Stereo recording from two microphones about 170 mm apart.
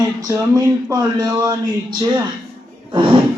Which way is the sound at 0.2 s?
20° right (ahead or behind).